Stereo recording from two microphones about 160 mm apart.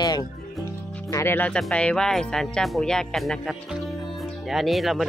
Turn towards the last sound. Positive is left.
turn(degrees=0)  # may be behind; listen again after turning